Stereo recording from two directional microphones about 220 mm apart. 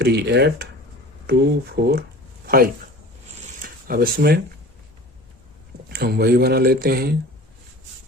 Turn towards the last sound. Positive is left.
turn(degrees=-45)  # may be behind; listen again after turning